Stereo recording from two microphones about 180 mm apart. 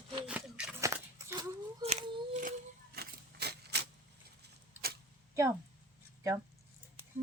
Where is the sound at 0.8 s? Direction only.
15° right (ahead or behind).